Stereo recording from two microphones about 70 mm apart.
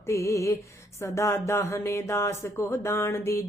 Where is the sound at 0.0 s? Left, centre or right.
Left.